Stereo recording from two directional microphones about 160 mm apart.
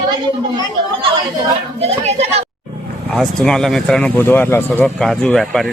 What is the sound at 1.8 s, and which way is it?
Speech, 40° right (ahead or behind).